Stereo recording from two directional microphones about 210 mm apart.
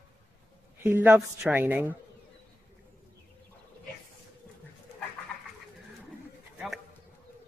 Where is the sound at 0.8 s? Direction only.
10° right (ahead or behind).